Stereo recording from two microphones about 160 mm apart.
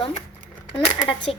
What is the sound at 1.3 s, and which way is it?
Speech, 35° left (ahead or behind).